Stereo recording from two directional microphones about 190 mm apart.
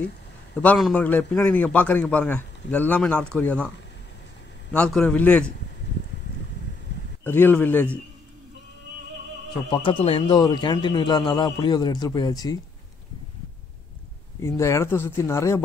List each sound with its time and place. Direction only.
0.6 s a man's voice: 5° left (ahead or behind)
4.7 s a man's voice: 5° left (ahead or behind)
7.2 s a man's voice: 10° left (ahead or behind)
9.7 s speech: 25° left (ahead or behind)
14.4 s a man's voice: 15° left (ahead or behind)